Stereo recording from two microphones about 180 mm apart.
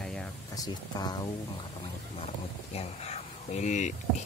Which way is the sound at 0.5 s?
20° left (ahead or behind).